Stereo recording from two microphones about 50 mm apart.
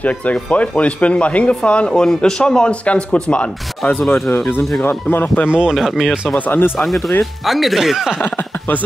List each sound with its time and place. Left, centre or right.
0.0 s speech: left
4.8 s speech: left
5.5 s speech: centre
5.8 s speech: centre
6.3 s speech: left
6.8 s speech: centre